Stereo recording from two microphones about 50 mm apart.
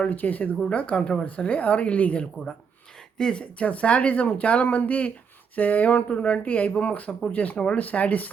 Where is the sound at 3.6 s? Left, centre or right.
Left.